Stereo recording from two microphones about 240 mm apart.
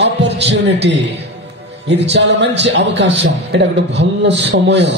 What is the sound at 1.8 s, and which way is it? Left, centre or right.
A man's voice, right.